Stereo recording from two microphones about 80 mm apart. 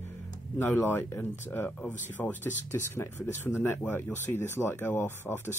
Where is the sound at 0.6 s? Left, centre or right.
Left.